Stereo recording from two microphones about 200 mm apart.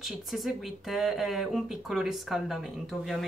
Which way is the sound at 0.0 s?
Centre (ahead or behind).